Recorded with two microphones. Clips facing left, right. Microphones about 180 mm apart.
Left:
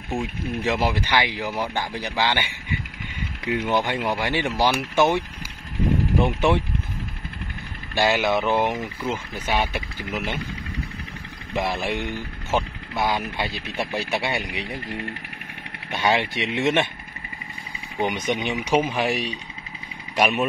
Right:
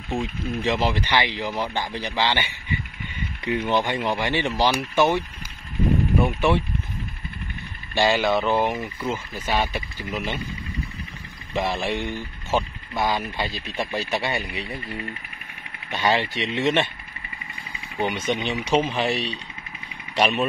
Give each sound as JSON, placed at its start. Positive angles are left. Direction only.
{"t": 0.1, "sound": "speech", "side_deg": 10}
{"t": 6.2, "sound": "speech", "side_deg": 15}
{"t": 7.9, "sound": "speech", "side_deg": 10}
{"t": 11.8, "sound": "speech", "side_deg": 15}
{"t": 15.9, "sound": "speech", "side_deg": 10}
{"t": 17.9, "sound": "speech", "side_deg": 15}